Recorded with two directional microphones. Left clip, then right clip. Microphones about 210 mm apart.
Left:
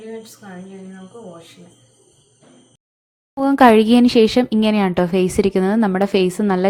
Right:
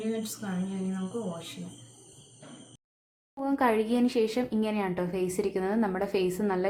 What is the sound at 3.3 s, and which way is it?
Speech, 40° left (ahead or behind).